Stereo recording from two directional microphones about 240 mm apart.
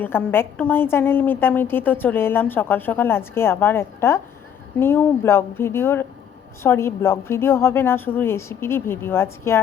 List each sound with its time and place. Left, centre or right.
0.0 s a woman's voice: centre